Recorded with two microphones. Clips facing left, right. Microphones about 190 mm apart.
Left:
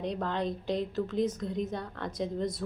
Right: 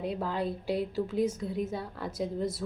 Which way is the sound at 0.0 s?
5° right (ahead or behind).